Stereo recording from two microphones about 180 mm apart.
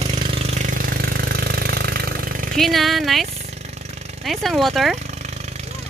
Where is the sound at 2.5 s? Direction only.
Centre (ahead or behind).